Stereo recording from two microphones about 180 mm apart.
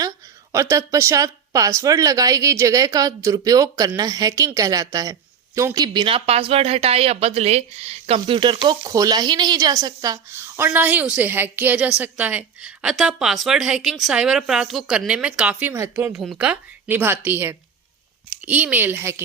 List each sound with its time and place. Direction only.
0.5 s speech: 15° right (ahead or behind)